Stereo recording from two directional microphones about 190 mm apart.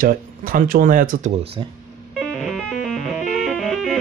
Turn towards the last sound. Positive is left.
turn(degrees=0)  # may be behind; listen again after turning